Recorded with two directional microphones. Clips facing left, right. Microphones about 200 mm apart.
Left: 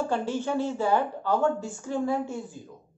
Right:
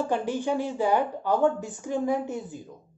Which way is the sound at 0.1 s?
15° right (ahead or behind).